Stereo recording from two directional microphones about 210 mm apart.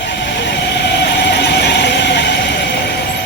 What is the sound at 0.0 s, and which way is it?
Vehicle, 55° left (ahead or behind).